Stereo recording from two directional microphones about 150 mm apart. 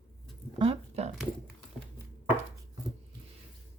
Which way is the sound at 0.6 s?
40° right (ahead or behind).